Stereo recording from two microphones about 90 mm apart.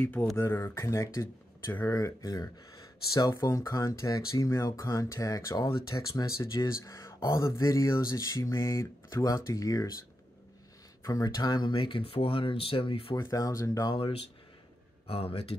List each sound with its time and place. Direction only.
0.0 s speech: 20° left (ahead or behind)
0.4 s speech: 30° left (ahead or behind)
11.1 s speech: 40° left (ahead or behind)
11.6 s speech: 70° left (ahead or behind); by 13.1 s 90° left
13.2 s speech: 35° left (ahead or behind)
13.9 s speech: 90° left